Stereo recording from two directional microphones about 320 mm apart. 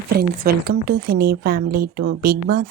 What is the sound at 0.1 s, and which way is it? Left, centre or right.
Speech, right.